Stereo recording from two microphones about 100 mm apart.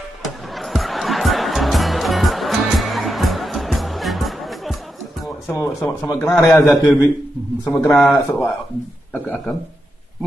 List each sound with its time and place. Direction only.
0.2 s music: centre (ahead or behind)
5.5 s a sound: 30° left (ahead or behind)
6.0 s a man's voice: 35° left (ahead or behind)